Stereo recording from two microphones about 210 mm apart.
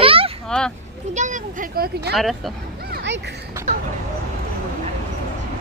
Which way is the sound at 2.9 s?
55° right (ahead or behind).